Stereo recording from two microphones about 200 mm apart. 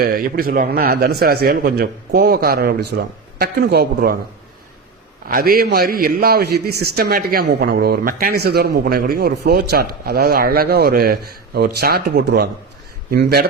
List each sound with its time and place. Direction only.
0.0 s a man's voice: 50° right (ahead or behind)
5.3 s a man's voice: 50° right (ahead or behind)